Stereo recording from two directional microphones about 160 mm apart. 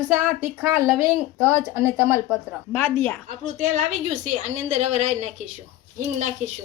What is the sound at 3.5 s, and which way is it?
A woman's voice, 50° right (ahead or behind).